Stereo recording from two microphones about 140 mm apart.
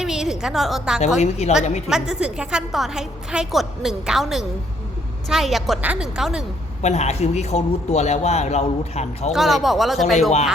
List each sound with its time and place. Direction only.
0.0 s a woman's voice: 5° right (ahead or behind)
1.2 s a man's voice: 50° left (ahead or behind)
1.9 s a woman's voice: 5° right (ahead or behind)
6.8 s a man's voice: 50° left (ahead or behind)
9.3 s a woman's voice: centre (ahead or behind)